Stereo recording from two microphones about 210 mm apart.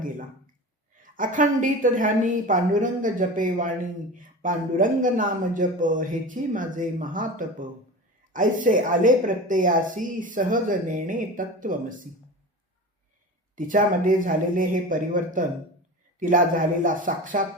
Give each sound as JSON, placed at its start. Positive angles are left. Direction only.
{"t": 0.9, "sound": "a woman's voice", "side_deg": -40}
{"t": 13.6, "sound": "a woman's voice", "side_deg": -40}